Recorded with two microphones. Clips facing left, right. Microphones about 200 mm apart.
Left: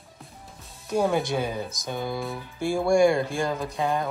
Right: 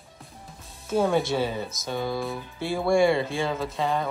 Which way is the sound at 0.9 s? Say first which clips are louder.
Right 1 dB; centre (ahead or behind).